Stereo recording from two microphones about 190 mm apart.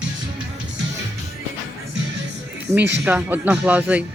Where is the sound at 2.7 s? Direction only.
15° right (ahead or behind).